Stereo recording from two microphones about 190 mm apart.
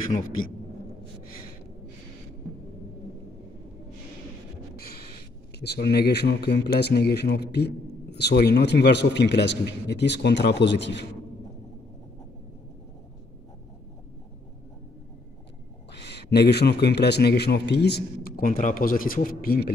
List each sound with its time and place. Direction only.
4.7 s a sound: 55° left (ahead or behind)
5.6 s speech: 60° left (ahead or behind)
15.9 s speech: 60° left (ahead or behind)